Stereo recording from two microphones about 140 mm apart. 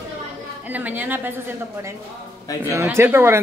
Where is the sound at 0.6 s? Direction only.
10° right (ahead or behind).